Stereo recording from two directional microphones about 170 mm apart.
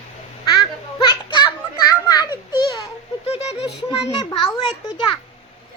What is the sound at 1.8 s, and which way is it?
Children playing, 25° left (ahead or behind).